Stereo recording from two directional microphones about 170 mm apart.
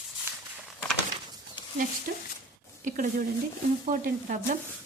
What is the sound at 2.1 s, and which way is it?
Speech, 55° right (ahead or behind).